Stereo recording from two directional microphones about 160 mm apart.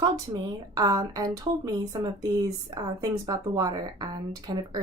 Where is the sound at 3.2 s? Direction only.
20° right (ahead or behind).